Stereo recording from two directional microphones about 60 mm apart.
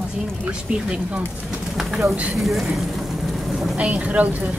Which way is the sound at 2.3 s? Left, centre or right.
Centre.